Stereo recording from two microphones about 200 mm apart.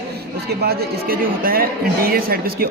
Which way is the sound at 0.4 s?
50° right (ahead or behind).